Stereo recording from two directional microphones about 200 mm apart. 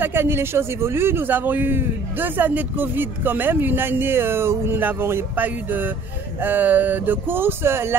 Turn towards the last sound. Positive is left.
turn(degrees=-10)  # may be behind; listen again after turning